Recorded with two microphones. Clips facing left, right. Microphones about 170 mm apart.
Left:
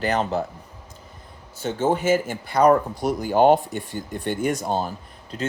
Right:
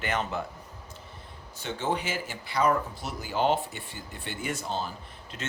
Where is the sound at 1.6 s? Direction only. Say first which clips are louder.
Left 9 dB; 45° left (ahead or behind).